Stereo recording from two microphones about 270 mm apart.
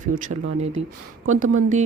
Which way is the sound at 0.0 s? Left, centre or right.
Right.